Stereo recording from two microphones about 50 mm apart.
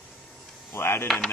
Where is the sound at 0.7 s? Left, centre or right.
Left.